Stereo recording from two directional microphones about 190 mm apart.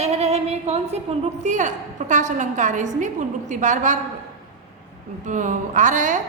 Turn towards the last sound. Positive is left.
turn(degrees=-40)  # may be behind; listen again after turning